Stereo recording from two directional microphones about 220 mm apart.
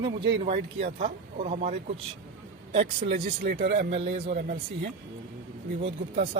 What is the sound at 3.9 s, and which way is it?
Speech, 25° right (ahead or behind).